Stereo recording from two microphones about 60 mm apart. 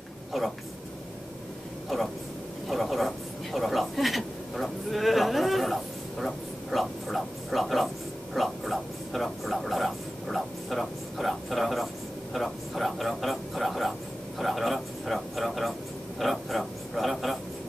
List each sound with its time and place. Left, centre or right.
0.3 s speech: centre
1.9 s speech: centre
2.7 s a sound: centre